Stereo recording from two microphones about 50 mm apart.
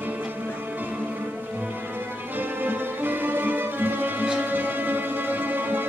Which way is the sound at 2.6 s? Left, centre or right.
Right.